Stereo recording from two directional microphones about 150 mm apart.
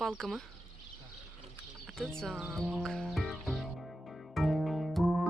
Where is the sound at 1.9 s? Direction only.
5° left (ahead or behind).